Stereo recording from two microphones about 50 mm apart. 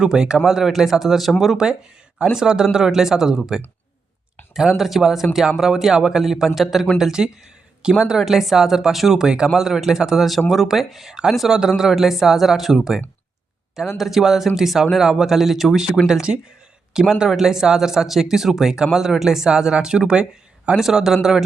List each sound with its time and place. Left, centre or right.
0.0 s speech: centre
2.3 s speech: centre
4.8 s speech: centre
7.0 s speech: centre